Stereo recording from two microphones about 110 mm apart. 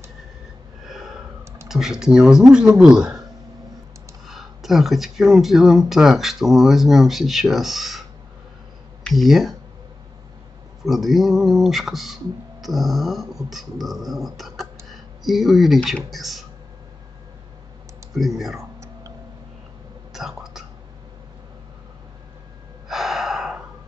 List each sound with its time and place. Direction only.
1.7 s speech: 5° right (ahead or behind)
4.3 s speech: centre (ahead or behind)
9.1 s speech: centre (ahead or behind)
10.8 s speech: centre (ahead or behind)
18.1 s speech: centre (ahead or behind)
18.6 s a sound: 30° right (ahead or behind)
20.1 s whispering: centre (ahead or behind)
22.8 s gasp: 5° right (ahead or behind)